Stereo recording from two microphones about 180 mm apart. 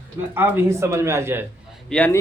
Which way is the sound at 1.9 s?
10° left (ahead or behind).